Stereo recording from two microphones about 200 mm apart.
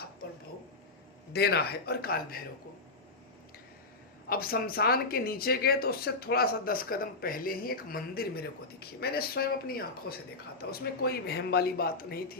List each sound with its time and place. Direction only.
1.3 s speech: 55° left (ahead or behind)
4.3 s speech: 50° left (ahead or behind)